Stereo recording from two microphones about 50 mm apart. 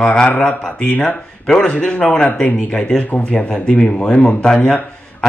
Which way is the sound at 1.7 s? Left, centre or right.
Left.